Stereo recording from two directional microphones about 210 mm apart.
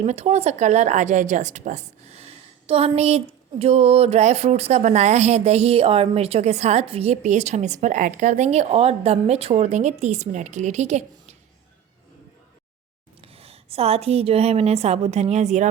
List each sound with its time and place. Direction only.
0.0 s a woman's voice: 30° right (ahead or behind)
13.2 s a woman's voice: 30° right (ahead or behind)